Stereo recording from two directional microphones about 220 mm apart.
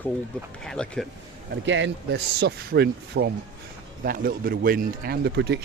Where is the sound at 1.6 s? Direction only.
55° right (ahead or behind).